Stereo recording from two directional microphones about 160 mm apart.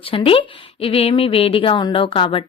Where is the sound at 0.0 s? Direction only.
35° left (ahead or behind).